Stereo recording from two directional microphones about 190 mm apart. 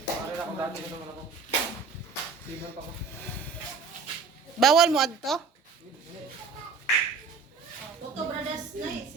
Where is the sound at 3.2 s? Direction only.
10° left (ahead or behind).